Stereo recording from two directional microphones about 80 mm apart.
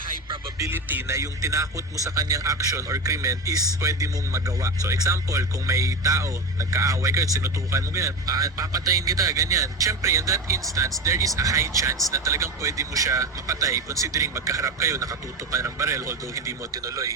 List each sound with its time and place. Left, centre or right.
0.7 s a man's voice: right
1.0 s speech: right